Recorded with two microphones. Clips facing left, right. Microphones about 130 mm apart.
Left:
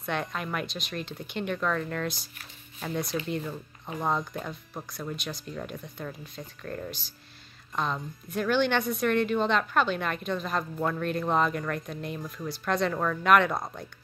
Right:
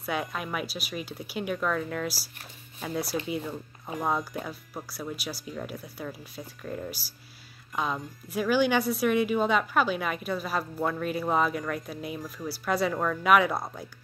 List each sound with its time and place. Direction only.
0.0 s speech: 5° right (ahead or behind)